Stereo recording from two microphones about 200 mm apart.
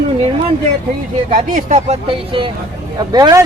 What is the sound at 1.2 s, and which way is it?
Speech, 35° right (ahead or behind).